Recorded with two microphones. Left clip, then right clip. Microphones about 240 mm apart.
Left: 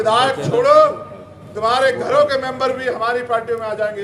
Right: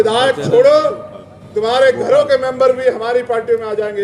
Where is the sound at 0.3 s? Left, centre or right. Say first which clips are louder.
Right 6 dB; right.